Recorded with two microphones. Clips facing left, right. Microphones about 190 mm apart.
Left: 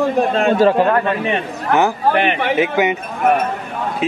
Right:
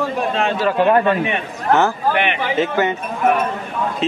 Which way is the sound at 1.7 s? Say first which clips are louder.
Left 1 dB; 15° left (ahead or behind).